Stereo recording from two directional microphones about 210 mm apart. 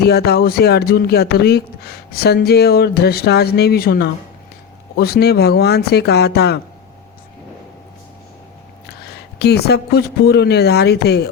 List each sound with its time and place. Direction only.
0.0 s speech: 50° left (ahead or behind)
9.4 s speech: 50° left (ahead or behind)